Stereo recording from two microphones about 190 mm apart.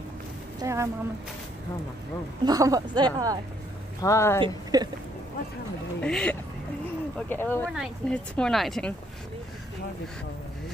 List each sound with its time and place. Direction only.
0.6 s speech: 15° right (ahead or behind)
2.4 s speech: 20° right (ahead or behind)
4.0 s speech: 15° left (ahead or behind)
4.4 s speech: 20° right (ahead or behind)
5.9 s speech: 5° left (ahead or behind)